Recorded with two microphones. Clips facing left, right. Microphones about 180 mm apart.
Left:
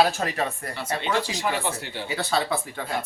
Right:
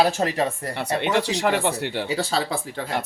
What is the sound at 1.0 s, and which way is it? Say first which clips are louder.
Speech: right 4 dB; 65° right (ahead or behind).